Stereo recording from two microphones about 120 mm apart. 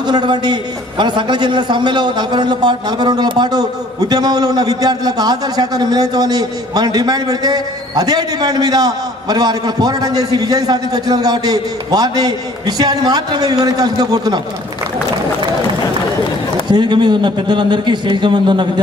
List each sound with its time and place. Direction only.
0.0 s a man's voice: 40° right (ahead or behind)
16.6 s a man's voice: 40° right (ahead or behind)